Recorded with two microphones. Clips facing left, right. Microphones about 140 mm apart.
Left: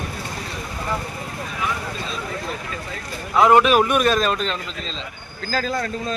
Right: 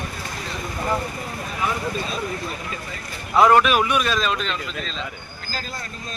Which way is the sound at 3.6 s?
40° left (ahead or behind).